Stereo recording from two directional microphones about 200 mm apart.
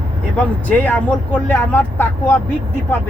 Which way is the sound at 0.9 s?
10° left (ahead or behind).